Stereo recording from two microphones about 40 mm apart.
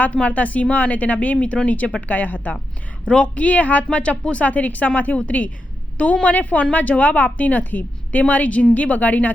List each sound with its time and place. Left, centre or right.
0.1 s a woman's voice: left
3.1 s a woman's voice: left
3.4 s a woman's voice: left
8.3 s a woman's voice: left